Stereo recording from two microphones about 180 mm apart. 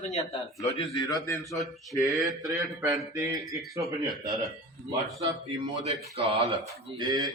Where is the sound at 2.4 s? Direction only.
15° right (ahead or behind).